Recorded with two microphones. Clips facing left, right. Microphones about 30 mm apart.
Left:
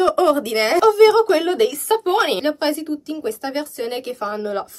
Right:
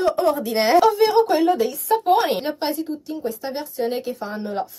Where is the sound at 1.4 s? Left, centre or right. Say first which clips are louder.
Left 1 dB; left.